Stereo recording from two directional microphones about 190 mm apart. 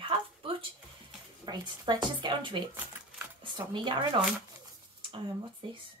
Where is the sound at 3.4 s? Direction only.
25° right (ahead or behind).